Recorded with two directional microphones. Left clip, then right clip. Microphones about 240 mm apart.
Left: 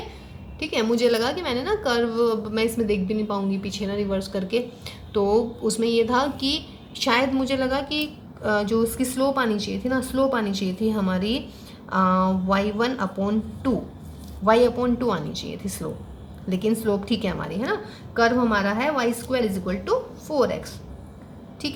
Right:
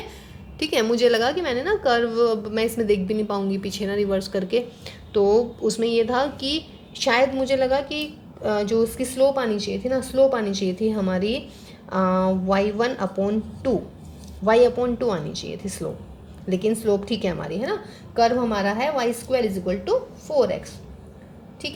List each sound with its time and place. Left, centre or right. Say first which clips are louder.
0.6 s a woman's voice: right 2 dB; right; by 20.6 s centre